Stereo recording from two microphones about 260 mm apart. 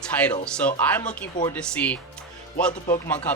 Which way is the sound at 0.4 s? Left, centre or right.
Centre.